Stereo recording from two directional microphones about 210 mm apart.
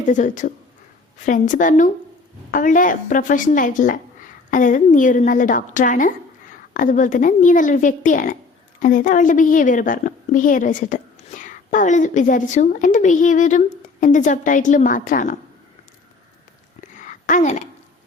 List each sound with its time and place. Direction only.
0.0 s a woman's voice: 35° left (ahead or behind)
17.2 s a woman's voice: 35° left (ahead or behind)